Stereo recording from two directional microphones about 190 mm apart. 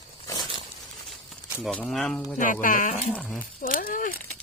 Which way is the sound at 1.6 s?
Centre (ahead or behind).